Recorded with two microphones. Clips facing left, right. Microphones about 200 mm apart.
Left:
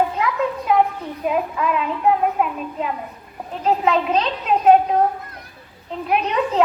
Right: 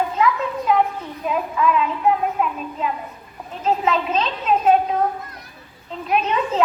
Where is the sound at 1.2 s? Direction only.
50° left (ahead or behind).